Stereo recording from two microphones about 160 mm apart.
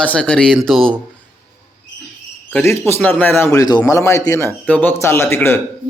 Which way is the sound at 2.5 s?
10° left (ahead or behind).